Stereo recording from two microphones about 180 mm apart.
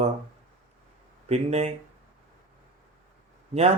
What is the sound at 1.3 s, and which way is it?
Speech, 35° right (ahead or behind).